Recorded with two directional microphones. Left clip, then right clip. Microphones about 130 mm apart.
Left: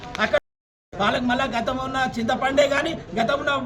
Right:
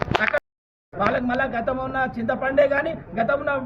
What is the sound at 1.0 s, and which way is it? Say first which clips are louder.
A man's voice: even; 20° left (ahead or behind).